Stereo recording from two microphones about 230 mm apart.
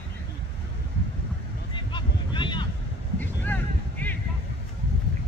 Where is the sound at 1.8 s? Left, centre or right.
Centre.